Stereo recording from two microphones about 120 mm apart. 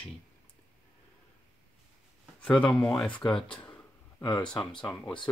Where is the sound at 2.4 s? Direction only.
10° left (ahead or behind).